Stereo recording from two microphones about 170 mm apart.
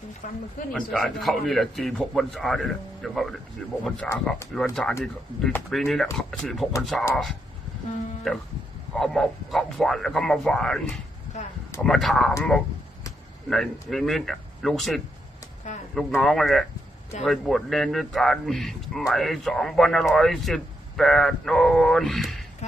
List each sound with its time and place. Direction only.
0.2 s speech: 50° left (ahead or behind)
0.7 s a man's voice: centre (ahead or behind)
8.3 s a man's voice: 5° left (ahead or behind)
11.3 s a sound: 45° left (ahead or behind)
11.8 s a man's voice: 5° left (ahead or behind)
15.6 s a sound: 45° left (ahead or behind)
16.0 s a man's voice: 5° left (ahead or behind)